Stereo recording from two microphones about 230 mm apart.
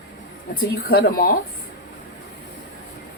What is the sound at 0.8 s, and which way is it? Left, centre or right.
Speech, left.